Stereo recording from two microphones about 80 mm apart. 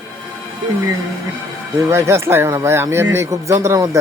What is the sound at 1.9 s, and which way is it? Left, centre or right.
Speech, right.